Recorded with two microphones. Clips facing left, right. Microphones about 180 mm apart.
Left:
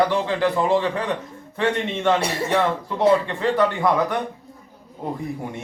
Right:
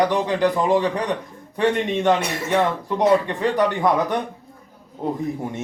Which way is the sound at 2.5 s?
15° right (ahead or behind).